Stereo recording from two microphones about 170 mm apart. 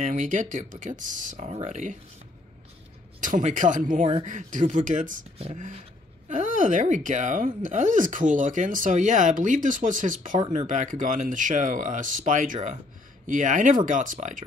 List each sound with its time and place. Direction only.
0.0 s speech: 50° right (ahead or behind)
3.2 s speech: 50° right (ahead or behind)
5.4 s speech: 35° right (ahead or behind)